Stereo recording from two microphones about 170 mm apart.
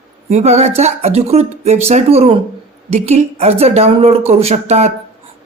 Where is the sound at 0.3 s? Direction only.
40° right (ahead or behind).